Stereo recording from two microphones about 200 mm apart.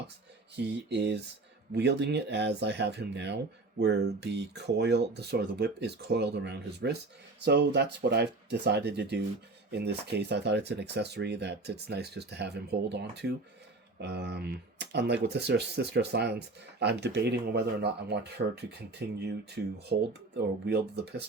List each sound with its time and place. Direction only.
0.5 s speech: 60° right (ahead or behind)